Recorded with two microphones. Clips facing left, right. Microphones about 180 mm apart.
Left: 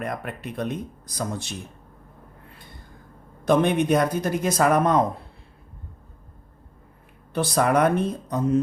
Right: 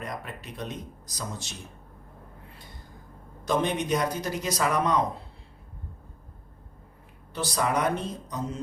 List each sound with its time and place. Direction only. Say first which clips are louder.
0.0 s speech: left 6 dB; 55° left (ahead or behind)
3.4 s speech: left 7 dB; 55° left (ahead or behind)
7.3 s speech: left 7 dB; 55° left (ahead or behind)